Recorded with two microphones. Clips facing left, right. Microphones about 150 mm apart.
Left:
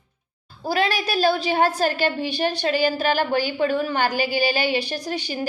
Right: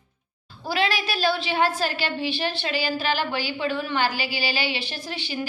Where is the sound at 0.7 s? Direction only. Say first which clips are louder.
Left 3 dB; 45° left (ahead or behind).